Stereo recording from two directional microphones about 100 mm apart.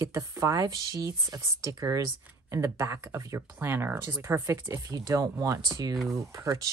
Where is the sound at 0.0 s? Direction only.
30° right (ahead or behind).